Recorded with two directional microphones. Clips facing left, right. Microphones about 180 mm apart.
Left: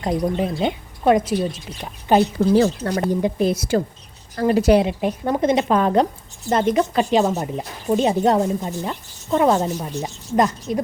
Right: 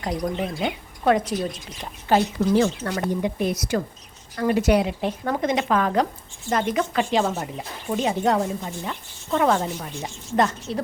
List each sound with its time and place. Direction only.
0.0 s a woman's voice: 25° left (ahead or behind)
1.2 s a woman's voice: 5° left (ahead or behind)
2.0 s a woman's voice: 25° left (ahead or behind)
7.1 s speech: 15° left (ahead or behind)
7.5 s a woman's voice: 35° left (ahead or behind)
9.3 s a woman's voice: 20° left (ahead or behind)
9.6 s a woman's voice: 40° left (ahead or behind)
10.3 s speech: 15° left (ahead or behind)